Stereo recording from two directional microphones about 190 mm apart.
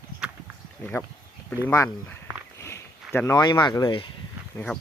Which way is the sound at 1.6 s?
15° left (ahead or behind).